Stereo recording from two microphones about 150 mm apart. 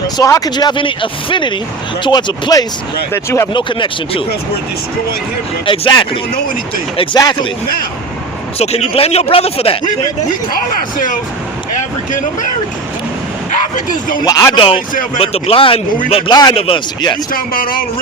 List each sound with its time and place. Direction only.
0.2 s speech: 25° left (ahead or behind)
3.5 s speech: 35° left (ahead or behind)
5.6 s speech: 35° left (ahead or behind)
8.5 s speech: 45° left (ahead or behind)
10.5 s speech: 60° left (ahead or behind)
13.5 s vehicle: 60° left (ahead or behind)
14.3 s speech: 25° left (ahead or behind); by 16.3 s 40° left (ahead or behind)
16.3 s speech: 30° left (ahead or behind)
17.3 s a man's voice: 70° left (ahead or behind)